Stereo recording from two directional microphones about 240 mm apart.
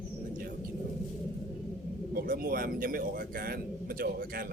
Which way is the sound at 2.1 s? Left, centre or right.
Right.